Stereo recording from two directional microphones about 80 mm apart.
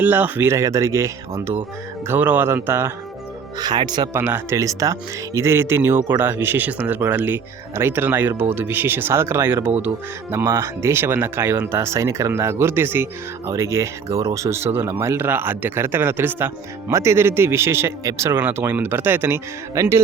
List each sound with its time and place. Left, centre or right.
0.0 s speech: right
0.5 s speech: right
2.0 s speech: right
3.6 s speech: right
4.2 s speech: right
4.5 s speech: right
10.3 s speech: right